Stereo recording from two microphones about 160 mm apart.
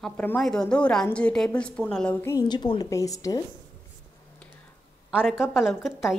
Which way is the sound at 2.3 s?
25° left (ahead or behind).